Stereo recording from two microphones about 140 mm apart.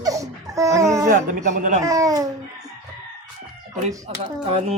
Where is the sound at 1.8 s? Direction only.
25° right (ahead or behind).